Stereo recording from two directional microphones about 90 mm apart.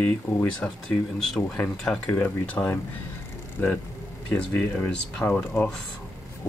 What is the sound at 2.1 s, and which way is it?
Speech, 20° left (ahead or behind).